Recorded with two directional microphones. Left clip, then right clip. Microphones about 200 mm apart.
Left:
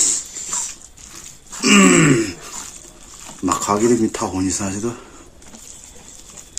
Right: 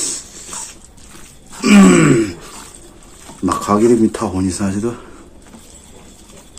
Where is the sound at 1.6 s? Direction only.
Centre (ahead or behind).